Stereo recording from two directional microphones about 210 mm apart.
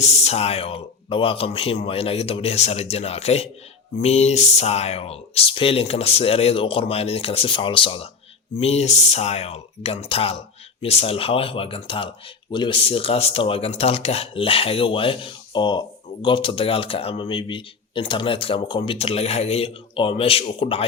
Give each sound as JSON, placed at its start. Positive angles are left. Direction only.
{"t": 0.0, "sound": "speech", "side_deg": 30}